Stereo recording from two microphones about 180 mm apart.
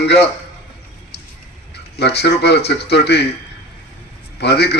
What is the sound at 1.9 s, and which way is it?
A man's voice, 65° left (ahead or behind).